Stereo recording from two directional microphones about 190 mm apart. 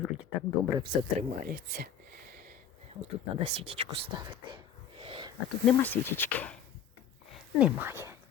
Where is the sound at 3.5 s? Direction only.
30° right (ahead or behind).